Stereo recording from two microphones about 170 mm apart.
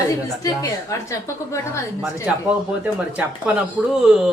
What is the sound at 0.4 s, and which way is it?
A woman's voice, 20° left (ahead or behind).